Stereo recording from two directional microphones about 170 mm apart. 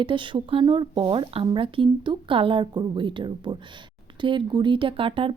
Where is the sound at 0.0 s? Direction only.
30° right (ahead or behind).